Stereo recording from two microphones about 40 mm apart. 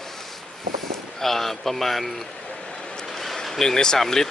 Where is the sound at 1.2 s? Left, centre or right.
Centre.